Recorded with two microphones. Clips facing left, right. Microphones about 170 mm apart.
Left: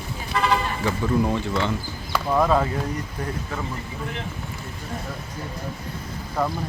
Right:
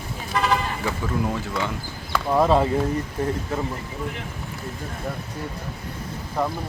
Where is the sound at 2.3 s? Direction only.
25° right (ahead or behind).